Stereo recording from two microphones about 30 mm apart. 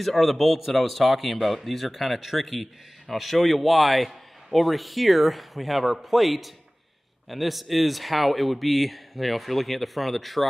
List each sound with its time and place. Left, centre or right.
0.0 s speech: centre